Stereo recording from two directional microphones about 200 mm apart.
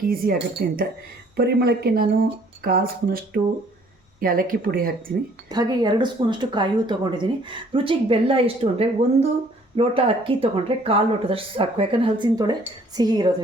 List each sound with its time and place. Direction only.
0.1 s speech: 50° right (ahead or behind)
5.5 s speech: 20° right (ahead or behind)